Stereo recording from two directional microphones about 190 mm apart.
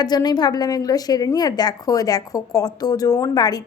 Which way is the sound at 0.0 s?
20° left (ahead or behind).